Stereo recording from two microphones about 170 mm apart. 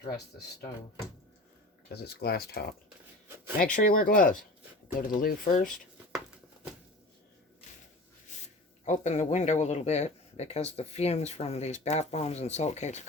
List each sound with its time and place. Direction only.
1.9 s speech: 70° left (ahead or behind)
3.6 s speech: 55° left (ahead or behind)
5.7 s a sound: centre (ahead or behind)
8.8 s speech: 45° left (ahead or behind)